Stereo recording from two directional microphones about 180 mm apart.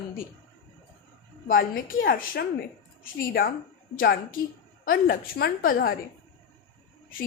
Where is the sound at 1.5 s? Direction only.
50° left (ahead or behind).